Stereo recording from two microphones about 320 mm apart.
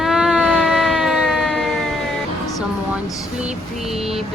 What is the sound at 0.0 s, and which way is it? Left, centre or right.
Siren, centre.